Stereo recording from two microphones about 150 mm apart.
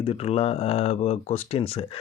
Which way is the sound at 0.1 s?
40° left (ahead or behind).